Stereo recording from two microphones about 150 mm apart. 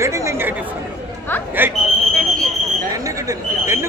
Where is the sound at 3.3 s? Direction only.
20° right (ahead or behind).